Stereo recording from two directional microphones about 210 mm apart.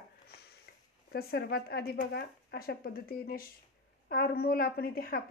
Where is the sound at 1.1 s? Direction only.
50° left (ahead or behind).